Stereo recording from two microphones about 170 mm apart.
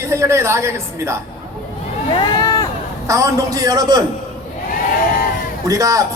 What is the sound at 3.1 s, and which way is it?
Speech, 20° right (ahead or behind).